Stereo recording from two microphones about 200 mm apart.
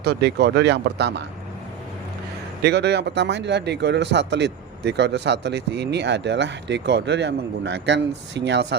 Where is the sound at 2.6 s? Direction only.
55° right (ahead or behind).